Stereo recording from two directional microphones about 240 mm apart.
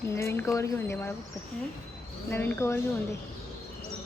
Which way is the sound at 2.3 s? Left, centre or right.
Centre.